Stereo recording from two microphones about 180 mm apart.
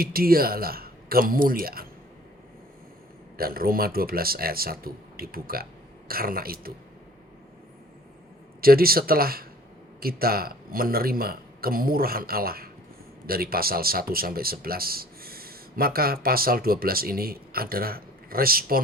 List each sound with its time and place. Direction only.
0.0 s speech: 55° right (ahead or behind)
3.3 s speech: 55° right (ahead or behind)
8.6 s speech: 55° right (ahead or behind)